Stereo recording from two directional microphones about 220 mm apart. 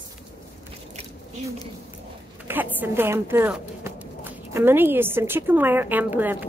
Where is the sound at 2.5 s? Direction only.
10° right (ahead or behind).